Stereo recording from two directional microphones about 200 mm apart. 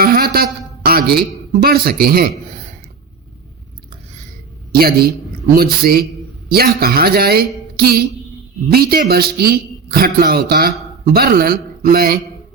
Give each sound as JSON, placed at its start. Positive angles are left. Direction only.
{"t": 0.0, "sound": "a sound", "side_deg": -50}
{"t": 0.9, "sound": "speech", "side_deg": -50}
{"t": 4.7, "sound": "a man's voice", "side_deg": -50}